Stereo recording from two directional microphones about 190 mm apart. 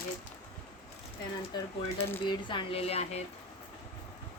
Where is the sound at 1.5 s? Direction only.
20° left (ahead or behind).